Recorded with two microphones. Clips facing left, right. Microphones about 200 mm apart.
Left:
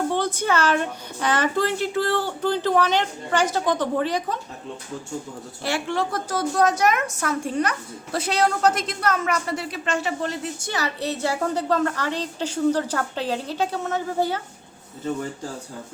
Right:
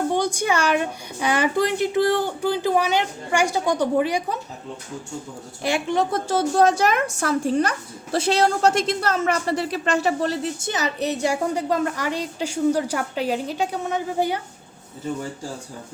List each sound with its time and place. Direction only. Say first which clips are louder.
0.1 s a woman's voice: right 1 dB; 15° right (ahead or behind)
5.6 s a woman's voice: right 3 dB; 20° right (ahead or behind); by 10.3 s 40° right (ahead or behind)
10.6 s a woman's voice: right 2 dB; 20° right (ahead or behind)